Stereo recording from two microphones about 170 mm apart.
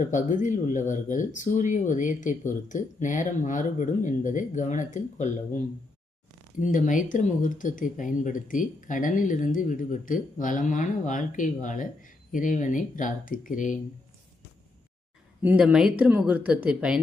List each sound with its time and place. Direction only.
0.1 s speech: 50° left (ahead or behind)
15.4 s speech: 10° right (ahead or behind)